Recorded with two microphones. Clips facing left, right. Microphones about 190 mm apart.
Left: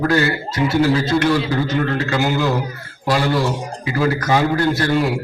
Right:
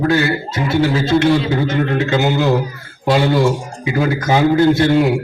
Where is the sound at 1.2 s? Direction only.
20° right (ahead or behind).